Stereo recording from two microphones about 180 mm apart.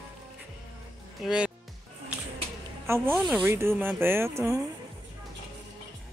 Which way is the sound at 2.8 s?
15° right (ahead or behind).